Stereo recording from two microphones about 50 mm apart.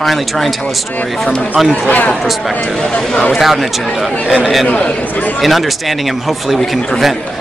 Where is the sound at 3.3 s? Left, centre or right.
Centre.